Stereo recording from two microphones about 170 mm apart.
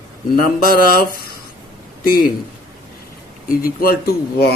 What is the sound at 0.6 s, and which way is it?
Speech, 60° left (ahead or behind).